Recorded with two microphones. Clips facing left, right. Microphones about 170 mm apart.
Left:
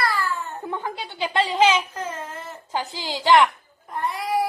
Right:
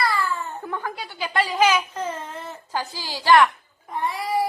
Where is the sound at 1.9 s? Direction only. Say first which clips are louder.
Right 2 dB; centre (ahead or behind).